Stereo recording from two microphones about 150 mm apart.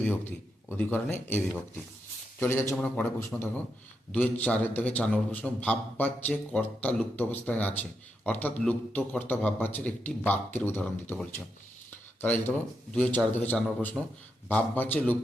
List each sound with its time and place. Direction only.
0.0 s a man's voice: 15° left (ahead or behind)